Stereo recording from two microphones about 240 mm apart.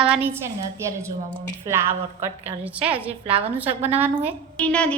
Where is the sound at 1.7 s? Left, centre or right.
Centre.